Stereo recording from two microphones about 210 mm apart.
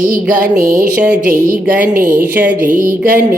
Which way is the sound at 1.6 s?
5° right (ahead or behind).